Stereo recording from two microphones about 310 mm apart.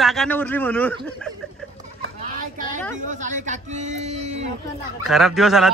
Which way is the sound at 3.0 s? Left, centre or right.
Right.